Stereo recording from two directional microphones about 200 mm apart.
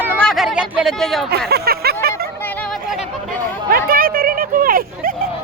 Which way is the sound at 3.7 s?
45° right (ahead or behind).